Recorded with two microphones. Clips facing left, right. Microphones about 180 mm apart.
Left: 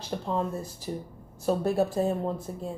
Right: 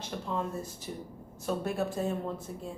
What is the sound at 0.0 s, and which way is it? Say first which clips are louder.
A woman's voice: left 4 dB; 35° left (ahead or behind).